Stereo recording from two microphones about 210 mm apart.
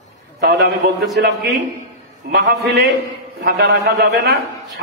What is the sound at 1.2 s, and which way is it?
A man's voice, 50° right (ahead or behind).